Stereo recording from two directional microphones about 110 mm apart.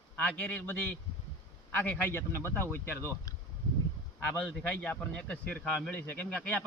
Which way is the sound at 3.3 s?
35° left (ahead or behind).